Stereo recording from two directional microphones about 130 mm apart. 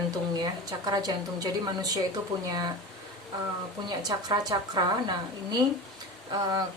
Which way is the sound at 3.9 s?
30° right (ahead or behind).